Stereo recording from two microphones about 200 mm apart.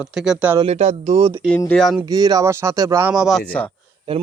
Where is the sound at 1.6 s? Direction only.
5° left (ahead or behind).